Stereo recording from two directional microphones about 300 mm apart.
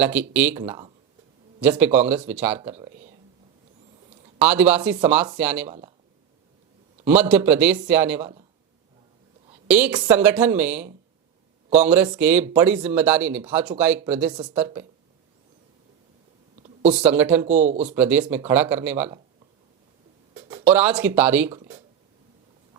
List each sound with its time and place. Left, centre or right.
0.0 s speech: centre
4.4 s speech: centre
7.2 s speech: centre
9.6 s speech: centre
16.6 s a sound: right
17.0 s speech: centre
17.4 s speech: right
17.9 s speech: centre
20.3 s speech: centre
21.5 s a sound: centre